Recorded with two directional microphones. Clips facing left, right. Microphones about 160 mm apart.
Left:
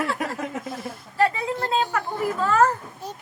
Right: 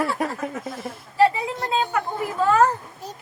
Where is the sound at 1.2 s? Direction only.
20° right (ahead or behind).